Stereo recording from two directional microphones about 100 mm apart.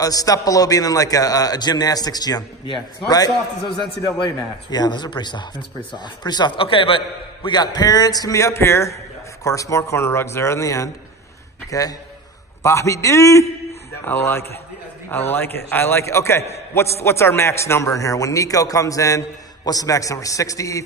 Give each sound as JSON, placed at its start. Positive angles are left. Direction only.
{"t": 0.0, "sound": "a man's voice", "side_deg": 35}
{"t": 7.4, "sound": "a man's voice", "side_deg": 45}